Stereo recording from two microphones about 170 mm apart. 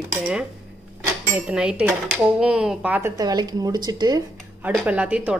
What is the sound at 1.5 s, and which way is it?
Speech, 5° right (ahead or behind).